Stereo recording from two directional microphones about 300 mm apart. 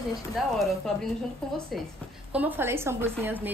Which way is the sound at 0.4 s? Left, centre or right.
Centre.